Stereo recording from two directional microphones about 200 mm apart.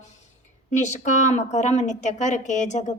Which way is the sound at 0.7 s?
35° left (ahead or behind).